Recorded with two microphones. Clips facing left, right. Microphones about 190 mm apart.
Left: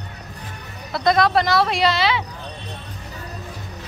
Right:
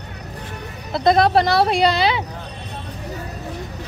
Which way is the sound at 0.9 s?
30° right (ahead or behind).